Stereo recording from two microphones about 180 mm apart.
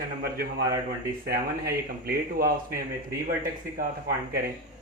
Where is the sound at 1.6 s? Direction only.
60° right (ahead or behind).